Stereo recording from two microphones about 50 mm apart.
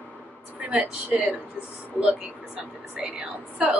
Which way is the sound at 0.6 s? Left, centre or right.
Right.